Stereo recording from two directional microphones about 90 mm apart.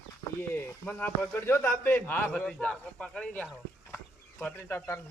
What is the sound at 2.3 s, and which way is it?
Speech, 10° left (ahead or behind).